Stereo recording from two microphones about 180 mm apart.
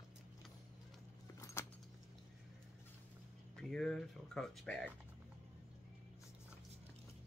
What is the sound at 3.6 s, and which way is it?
Speech, 5° left (ahead or behind).